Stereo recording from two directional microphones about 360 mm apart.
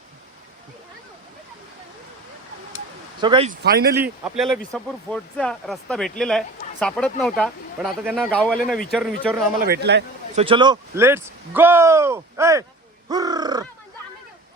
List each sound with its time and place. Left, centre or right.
3.2 s a man's voice: centre
3.9 s speech: centre
9.6 s a man's voice: right
10.4 s speech: centre
13.1 s crow: centre